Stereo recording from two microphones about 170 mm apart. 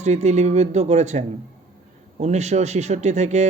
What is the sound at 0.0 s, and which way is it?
Speech, 40° right (ahead or behind).